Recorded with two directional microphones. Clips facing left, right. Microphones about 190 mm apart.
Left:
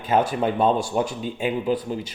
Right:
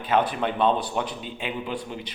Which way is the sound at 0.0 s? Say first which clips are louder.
Left 3 dB; 45° left (ahead or behind).